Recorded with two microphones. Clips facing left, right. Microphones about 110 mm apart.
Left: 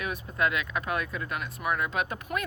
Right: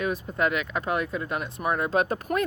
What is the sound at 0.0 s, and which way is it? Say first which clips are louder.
Speech: right 3 dB; 30° right (ahead or behind).